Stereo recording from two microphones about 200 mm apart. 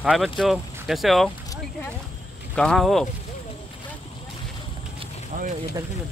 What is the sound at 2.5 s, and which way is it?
Speech, 5° left (ahead or behind).